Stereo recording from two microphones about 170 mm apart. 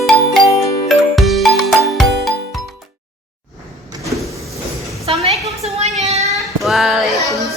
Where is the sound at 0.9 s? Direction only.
Centre (ahead or behind).